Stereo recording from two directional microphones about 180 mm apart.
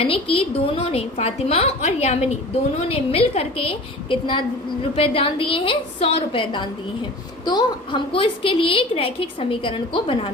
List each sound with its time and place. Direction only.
0.0 s a woman's voice: 30° left (ahead or behind)